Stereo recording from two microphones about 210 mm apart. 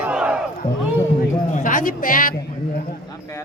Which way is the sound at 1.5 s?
40° left (ahead or behind).